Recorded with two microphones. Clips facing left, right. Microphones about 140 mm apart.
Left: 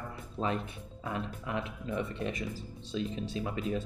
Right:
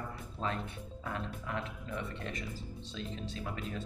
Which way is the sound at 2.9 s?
20° left (ahead or behind).